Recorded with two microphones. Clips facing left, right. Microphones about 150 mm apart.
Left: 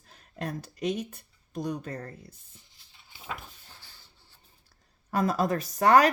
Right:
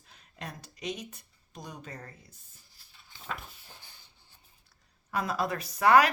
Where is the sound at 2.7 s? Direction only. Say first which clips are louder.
Even; 20° left (ahead or behind).